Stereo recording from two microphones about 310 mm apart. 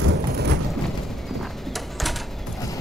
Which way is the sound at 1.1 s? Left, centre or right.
Centre.